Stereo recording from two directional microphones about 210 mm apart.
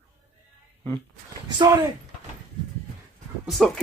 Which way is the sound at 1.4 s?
20° right (ahead or behind).